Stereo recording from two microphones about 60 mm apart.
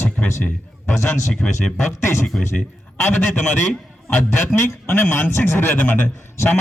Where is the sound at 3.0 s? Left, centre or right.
Left.